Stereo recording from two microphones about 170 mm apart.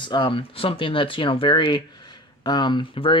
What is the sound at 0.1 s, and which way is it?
Speech, 30° left (ahead or behind).